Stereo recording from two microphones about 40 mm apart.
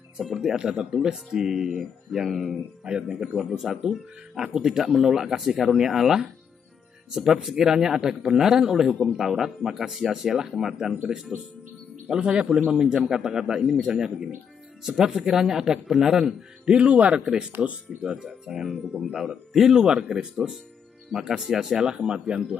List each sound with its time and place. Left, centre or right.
0.2 s speech: centre
0.6 s a man's voice: right
3.4 s a man's voice: centre
16.8 s speech: right
18.2 s a man's voice: centre
21.8 s speech: right